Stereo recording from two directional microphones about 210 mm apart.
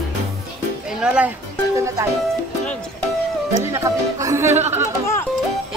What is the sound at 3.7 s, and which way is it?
Speech, 15° right (ahead or behind).